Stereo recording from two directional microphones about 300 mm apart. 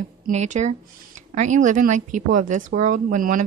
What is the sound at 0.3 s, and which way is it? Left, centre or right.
A woman's voice, right.